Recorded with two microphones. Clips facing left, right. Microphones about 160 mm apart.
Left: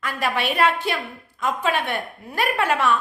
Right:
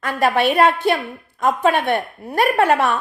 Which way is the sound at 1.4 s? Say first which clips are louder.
Right 6 dB; 50° right (ahead or behind).